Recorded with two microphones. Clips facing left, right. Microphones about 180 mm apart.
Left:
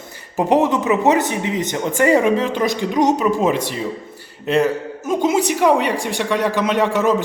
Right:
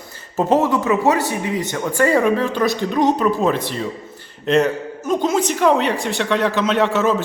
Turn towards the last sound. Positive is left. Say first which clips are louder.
# even
turn(degrees=15)  # may be behind; listen again after turning